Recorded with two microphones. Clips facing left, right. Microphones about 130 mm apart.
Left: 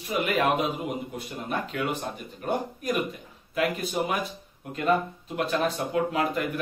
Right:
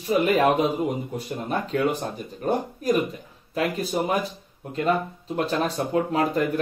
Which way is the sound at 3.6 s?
35° right (ahead or behind).